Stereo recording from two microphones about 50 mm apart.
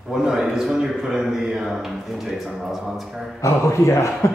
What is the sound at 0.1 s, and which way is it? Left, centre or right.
A man's voice, centre.